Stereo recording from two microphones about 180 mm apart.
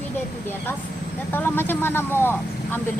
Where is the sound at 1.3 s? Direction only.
10° left (ahead or behind).